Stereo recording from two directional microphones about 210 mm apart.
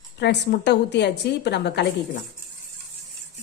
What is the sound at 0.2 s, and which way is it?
Speech, 55° left (ahead or behind).